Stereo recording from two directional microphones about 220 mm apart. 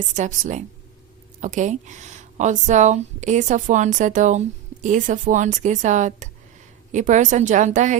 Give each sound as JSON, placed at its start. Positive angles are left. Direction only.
{"t": 0.1, "sound": "speech", "side_deg": -35}